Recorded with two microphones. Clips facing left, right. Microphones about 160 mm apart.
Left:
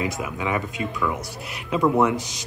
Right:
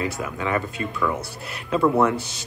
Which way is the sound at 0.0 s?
15° left (ahead or behind).